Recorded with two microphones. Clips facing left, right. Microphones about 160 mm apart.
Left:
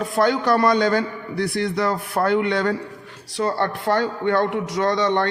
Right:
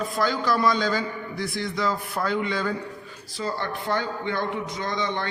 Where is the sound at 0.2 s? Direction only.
60° left (ahead or behind).